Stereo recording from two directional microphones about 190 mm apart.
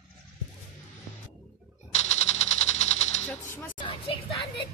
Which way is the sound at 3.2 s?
10° left (ahead or behind).